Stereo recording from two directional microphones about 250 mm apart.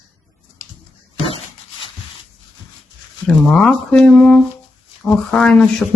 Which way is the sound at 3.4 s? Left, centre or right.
Centre.